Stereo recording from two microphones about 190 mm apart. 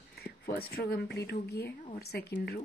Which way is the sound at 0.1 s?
55° left (ahead or behind).